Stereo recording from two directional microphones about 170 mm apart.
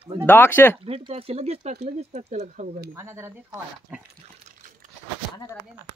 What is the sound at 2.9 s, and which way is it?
Speech, 15° right (ahead or behind).